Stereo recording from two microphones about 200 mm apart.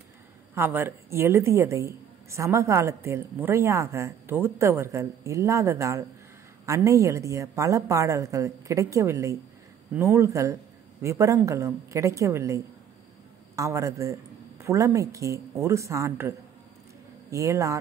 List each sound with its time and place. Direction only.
0.6 s a woman's voice: 10° right (ahead or behind)